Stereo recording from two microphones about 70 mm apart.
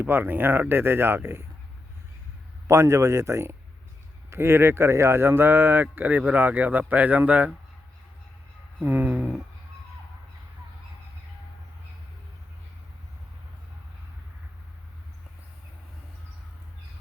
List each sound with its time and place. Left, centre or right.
0.0 s speech: right
2.6 s speech: right
4.3 s speech: right
8.8 s a sound: right